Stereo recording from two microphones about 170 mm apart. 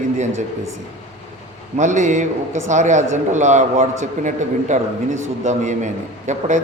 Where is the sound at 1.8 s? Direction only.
45° right (ahead or behind).